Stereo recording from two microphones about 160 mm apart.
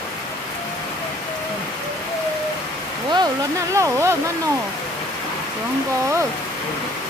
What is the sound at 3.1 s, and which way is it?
Speech, 20° right (ahead or behind).